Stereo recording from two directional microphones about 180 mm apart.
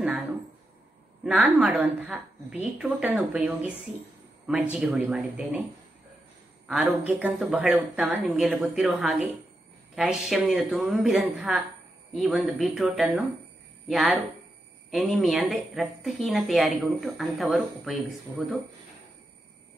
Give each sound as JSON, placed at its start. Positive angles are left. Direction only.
{"t": 1.2, "sound": "a woman's voice", "side_deg": 0}
{"t": 6.7, "sound": "speech", "side_deg": -5}